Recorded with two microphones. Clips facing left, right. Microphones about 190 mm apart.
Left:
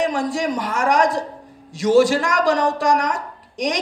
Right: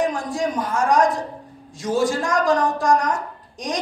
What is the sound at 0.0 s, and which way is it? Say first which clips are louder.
A woman's voice: left 2 dB; 90° left.